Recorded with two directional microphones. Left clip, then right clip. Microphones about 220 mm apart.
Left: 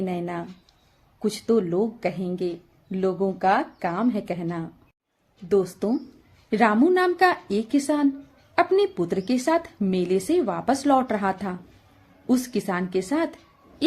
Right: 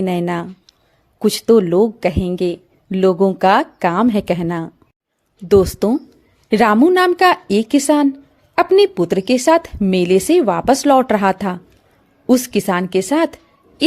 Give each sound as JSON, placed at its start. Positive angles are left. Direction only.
{"t": 0.0, "sound": "a woman's voice", "side_deg": -45}